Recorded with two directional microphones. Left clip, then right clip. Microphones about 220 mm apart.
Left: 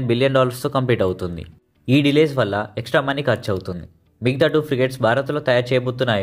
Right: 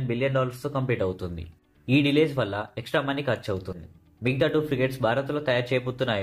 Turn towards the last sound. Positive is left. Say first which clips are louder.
# left 7 dB
turn(degrees=30)  # may be behind; listen again after turning